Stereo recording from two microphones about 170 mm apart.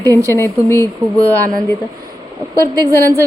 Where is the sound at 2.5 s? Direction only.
20° right (ahead or behind).